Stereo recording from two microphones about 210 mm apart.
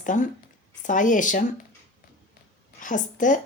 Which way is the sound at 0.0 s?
40° left (ahead or behind).